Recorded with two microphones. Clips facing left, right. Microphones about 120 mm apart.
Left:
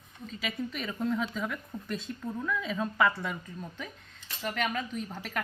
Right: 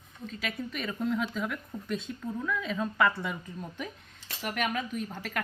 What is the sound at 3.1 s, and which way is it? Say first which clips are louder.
Speech: right 1 dB; 15° right (ahead or behind).